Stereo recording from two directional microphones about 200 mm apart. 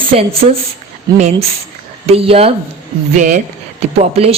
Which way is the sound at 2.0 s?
30° right (ahead or behind).